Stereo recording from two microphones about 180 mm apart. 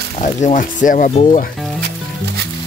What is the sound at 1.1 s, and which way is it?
Speech, 35° left (ahead or behind).